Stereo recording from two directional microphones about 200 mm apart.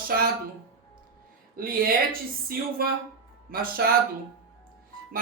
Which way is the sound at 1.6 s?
45° right (ahead or behind).